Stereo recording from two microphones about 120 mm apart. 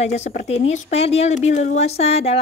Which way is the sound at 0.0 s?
65° left (ahead or behind).